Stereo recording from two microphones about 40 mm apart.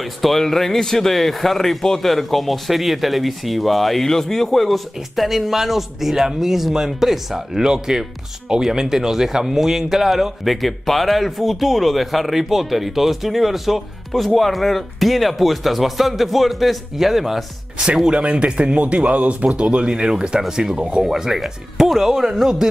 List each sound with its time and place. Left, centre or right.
0.0 s a man's voice: centre
17.7 s speech: centre
18.1 s speech: right; by 22.7 s centre